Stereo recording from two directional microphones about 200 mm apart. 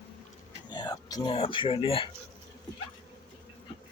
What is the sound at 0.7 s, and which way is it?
Speech, 20° left (ahead or behind).